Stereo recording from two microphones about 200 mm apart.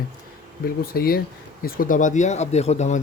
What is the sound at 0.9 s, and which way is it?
Speech, 50° left (ahead or behind).